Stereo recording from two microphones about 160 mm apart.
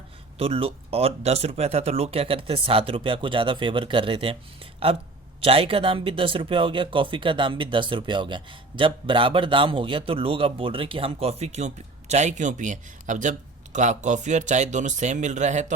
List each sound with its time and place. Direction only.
0.3 s speech: 35° right (ahead or behind)